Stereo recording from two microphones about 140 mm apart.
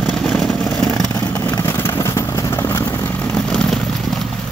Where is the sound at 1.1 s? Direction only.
15° left (ahead or behind).